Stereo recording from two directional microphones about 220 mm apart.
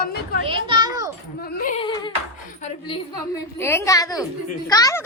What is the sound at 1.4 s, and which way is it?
Speech, 40° left (ahead or behind).